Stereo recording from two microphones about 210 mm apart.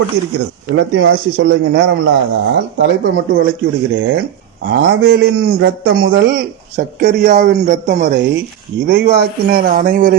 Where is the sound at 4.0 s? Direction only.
60° right (ahead or behind).